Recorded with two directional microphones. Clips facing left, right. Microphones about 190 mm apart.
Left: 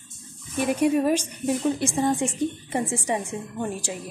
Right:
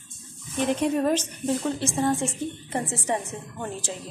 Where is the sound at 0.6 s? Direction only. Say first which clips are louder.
Left 2 dB; 10° left (ahead or behind).